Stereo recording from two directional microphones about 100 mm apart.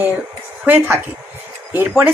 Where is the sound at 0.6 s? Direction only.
20° right (ahead or behind).